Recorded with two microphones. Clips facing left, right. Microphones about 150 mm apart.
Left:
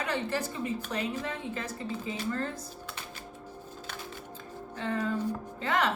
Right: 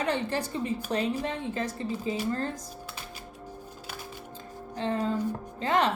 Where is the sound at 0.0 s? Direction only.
30° right (ahead or behind).